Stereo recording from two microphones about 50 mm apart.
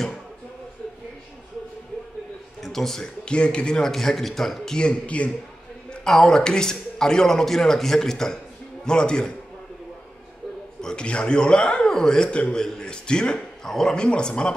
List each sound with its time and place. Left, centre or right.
2.6 s speech: centre
3.3 s a man's voice: left
3.9 s speech: centre
4.7 s a man's voice: left
6.0 s speech: centre
10.8 s a man's voice: centre
13.7 s speech: centre
13.9 s a man's voice: centre